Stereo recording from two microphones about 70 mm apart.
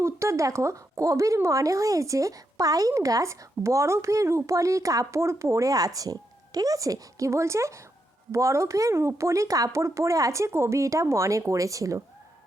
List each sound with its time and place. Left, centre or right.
0.0 s speech: right